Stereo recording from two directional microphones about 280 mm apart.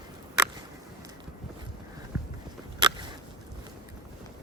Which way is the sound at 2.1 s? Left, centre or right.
Centre.